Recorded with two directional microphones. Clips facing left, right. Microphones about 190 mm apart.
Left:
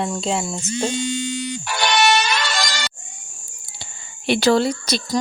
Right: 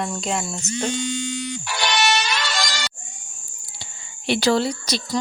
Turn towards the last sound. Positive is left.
turn(degrees=55)  # may be behind; listen again after turning